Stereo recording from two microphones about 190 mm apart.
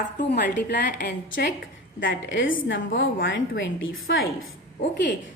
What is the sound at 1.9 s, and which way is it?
A woman's voice, 75° left (ahead or behind).